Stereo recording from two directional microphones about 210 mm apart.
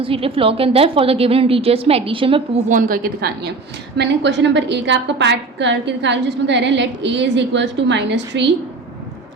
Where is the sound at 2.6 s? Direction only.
40° right (ahead or behind); by 8.4 s 55° right (ahead or behind).